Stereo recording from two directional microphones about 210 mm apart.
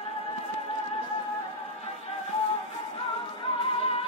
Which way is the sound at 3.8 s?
25° left (ahead or behind).